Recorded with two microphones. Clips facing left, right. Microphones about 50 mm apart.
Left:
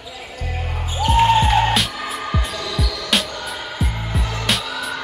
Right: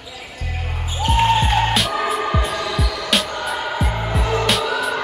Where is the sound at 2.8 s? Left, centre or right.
Right.